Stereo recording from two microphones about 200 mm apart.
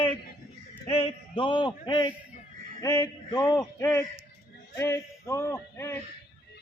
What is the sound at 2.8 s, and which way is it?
A man's voice, 20° left (ahead or behind).